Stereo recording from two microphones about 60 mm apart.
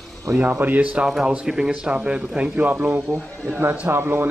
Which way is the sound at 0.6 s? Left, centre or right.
Right.